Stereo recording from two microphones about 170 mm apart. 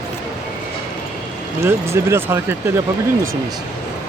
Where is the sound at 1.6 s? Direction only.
15° right (ahead or behind).